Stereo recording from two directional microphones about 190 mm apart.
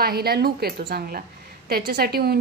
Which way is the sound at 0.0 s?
55° right (ahead or behind).